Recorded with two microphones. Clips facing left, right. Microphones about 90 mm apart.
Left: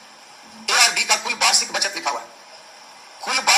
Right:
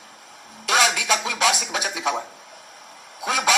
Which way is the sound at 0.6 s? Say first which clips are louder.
Right 1 dB; 35° right (ahead or behind).